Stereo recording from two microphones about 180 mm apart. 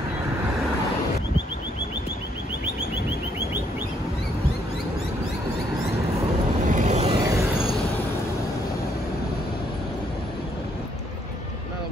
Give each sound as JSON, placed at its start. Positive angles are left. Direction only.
{"t": 6.6, "sound": "vehicle", "side_deg": -45}
{"t": 7.2, "sound": "vehicle", "side_deg": -20}